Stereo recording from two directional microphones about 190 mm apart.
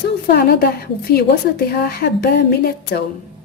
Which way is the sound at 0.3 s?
55° left (ahead or behind).